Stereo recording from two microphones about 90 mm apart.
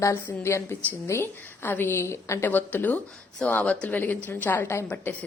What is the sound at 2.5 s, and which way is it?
A woman's voice, 20° left (ahead or behind).